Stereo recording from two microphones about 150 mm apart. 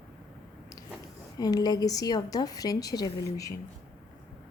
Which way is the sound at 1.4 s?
25° left (ahead or behind).